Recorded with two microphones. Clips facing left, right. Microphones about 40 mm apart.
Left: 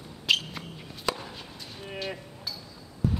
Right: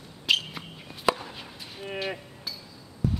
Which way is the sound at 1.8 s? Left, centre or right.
Centre.